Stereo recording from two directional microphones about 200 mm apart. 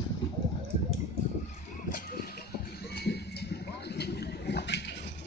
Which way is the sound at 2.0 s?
50° left (ahead or behind).